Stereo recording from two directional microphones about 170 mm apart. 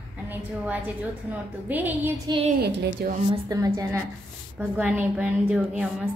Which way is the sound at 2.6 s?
70° right (ahead or behind).